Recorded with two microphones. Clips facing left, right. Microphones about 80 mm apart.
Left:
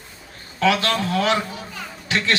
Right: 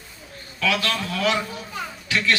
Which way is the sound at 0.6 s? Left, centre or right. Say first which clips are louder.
Left 5 dB; left.